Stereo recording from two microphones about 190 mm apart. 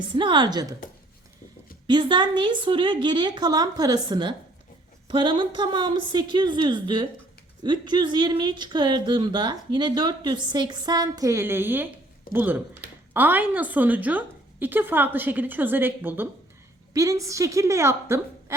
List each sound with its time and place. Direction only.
0.1 s a woman's voice: 25° right (ahead or behind)
1.9 s a woman's voice: 25° right (ahead or behind)